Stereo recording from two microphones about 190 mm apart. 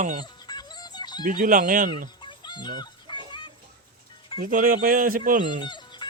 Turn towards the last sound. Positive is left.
turn(degrees=25)  # may be behind; listen again after turning